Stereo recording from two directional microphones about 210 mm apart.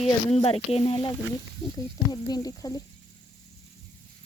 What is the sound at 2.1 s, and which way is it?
Speech, 20° left (ahead or behind).